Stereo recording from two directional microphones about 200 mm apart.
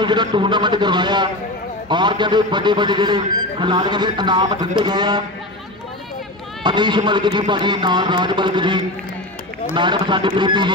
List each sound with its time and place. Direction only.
0.0 s speech: 20° right (ahead or behind)
6.6 s speech: 20° right (ahead or behind)